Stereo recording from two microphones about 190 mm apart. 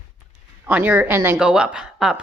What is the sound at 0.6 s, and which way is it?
A woman's voice, 10° right (ahead or behind).